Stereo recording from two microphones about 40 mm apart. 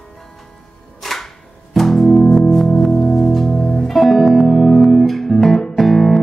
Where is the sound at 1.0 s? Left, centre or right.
Centre.